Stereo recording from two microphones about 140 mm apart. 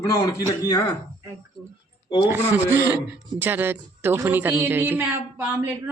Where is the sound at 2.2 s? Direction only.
15° right (ahead or behind).